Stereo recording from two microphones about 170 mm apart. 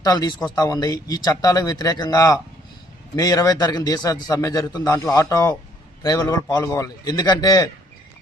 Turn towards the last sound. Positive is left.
turn(degrees=20)  # may be behind; listen again after turning